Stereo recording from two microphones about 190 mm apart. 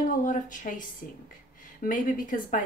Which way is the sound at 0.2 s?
40° left (ahead or behind).